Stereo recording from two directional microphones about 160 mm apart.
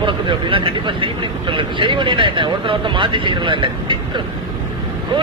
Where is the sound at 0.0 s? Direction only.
30° right (ahead or behind).